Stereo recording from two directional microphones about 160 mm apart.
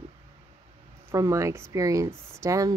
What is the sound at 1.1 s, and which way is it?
Speech, 20° right (ahead or behind).